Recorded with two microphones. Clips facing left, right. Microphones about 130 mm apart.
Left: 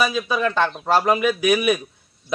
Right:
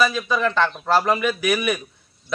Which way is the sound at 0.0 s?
15° left (ahead or behind).